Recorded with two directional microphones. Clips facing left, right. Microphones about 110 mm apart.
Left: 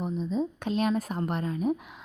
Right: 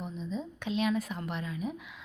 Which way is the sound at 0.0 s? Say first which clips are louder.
Left 8 dB; 40° left (ahead or behind).